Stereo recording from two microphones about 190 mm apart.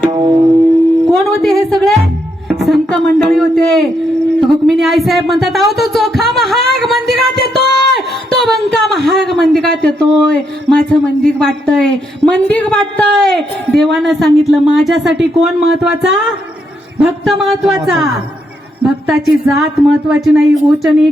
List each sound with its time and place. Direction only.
0.0 s music: 25° right (ahead or behind)
1.1 s music: centre (ahead or behind)
2.6 s a woman's voice: centre (ahead or behind)